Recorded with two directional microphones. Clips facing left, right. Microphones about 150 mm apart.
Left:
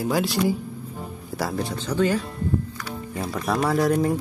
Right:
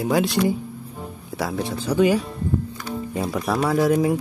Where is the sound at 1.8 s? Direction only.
10° right (ahead or behind).